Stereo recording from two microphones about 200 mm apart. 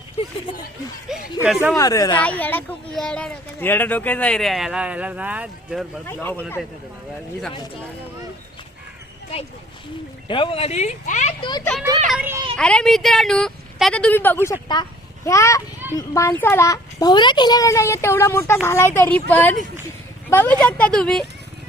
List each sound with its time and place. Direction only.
0.5 s speech: 25° left (ahead or behind)
1.4 s speech: 5° right (ahead or behind)
1.8 s speech: 20° left (ahead or behind)
2.2 s speech: 10° left (ahead or behind)
10.2 s speech: 25° left (ahead or behind)
12.0 s a child's voice: 5° right (ahead or behind)
12.5 s speech: 5° left (ahead or behind)